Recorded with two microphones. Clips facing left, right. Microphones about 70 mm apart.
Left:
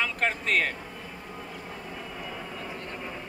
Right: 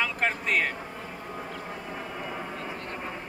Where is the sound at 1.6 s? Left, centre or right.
Right.